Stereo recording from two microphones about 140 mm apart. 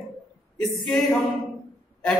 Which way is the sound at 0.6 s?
5° left (ahead or behind).